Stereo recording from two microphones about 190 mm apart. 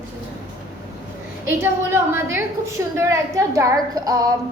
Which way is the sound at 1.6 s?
10° right (ahead or behind).